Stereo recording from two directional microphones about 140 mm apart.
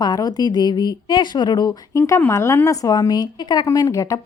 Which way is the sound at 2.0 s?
15° left (ahead or behind).